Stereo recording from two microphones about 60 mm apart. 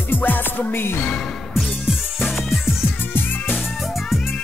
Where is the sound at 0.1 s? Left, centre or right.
Left.